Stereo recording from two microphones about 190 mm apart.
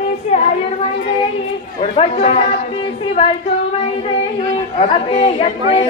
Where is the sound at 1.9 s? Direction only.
30° left (ahead or behind).